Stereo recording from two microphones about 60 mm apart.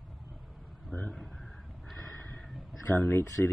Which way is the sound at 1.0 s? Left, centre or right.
Centre.